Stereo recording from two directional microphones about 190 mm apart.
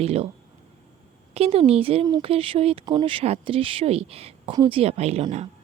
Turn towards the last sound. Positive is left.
turn(degrees=-35)  # may be behind; listen again after turning